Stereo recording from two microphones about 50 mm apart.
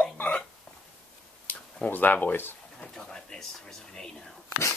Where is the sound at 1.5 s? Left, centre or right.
Left.